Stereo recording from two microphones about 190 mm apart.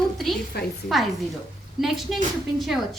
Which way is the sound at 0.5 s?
55° left (ahead or behind).